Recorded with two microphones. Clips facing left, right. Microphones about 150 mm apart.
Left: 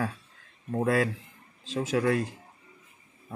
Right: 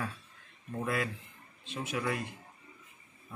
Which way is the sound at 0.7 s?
85° left.